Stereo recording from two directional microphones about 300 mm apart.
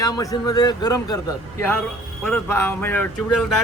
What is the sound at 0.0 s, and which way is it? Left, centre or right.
Speech, centre.